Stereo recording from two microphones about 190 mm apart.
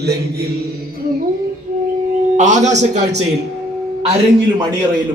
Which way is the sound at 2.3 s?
40° right (ahead or behind).